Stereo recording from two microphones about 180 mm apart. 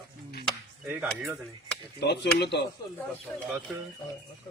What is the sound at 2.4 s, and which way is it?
Speech, 70° left (ahead or behind).